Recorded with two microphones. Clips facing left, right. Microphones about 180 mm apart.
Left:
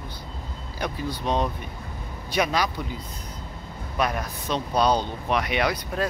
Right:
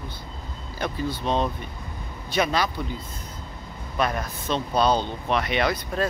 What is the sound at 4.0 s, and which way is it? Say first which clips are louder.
Speech: even; 10° left (ahead or behind).